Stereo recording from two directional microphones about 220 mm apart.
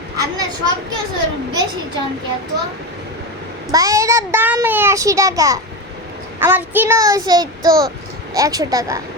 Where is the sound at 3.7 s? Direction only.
15° right (ahead or behind).